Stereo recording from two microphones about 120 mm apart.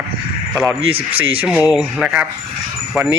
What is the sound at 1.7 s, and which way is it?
Speech, 5° right (ahead or behind).